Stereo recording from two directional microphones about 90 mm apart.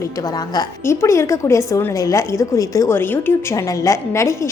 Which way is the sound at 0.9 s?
30° left (ahead or behind).